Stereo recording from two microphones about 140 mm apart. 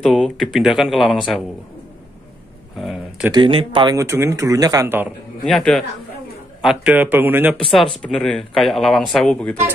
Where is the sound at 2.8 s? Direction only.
5° right (ahead or behind).